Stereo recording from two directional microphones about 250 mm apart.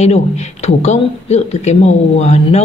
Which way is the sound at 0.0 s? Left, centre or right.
Left.